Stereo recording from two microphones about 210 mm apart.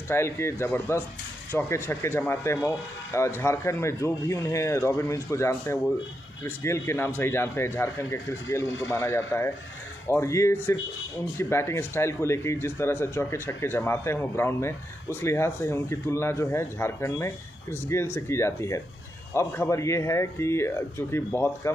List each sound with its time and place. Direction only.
0.1 s speech: 10° left (ahead or behind)